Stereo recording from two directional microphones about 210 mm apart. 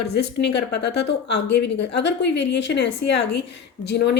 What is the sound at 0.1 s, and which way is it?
A woman's voice, 50° left (ahead or behind).